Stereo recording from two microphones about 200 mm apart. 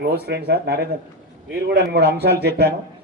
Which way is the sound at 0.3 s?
55° right (ahead or behind).